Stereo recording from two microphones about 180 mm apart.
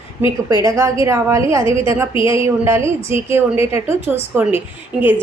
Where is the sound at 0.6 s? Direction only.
15° right (ahead or behind).